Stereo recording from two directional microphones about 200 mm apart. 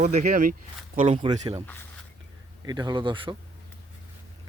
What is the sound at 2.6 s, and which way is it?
Speech, 20° right (ahead or behind).